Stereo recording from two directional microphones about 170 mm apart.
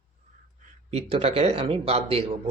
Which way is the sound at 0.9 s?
35° right (ahead or behind).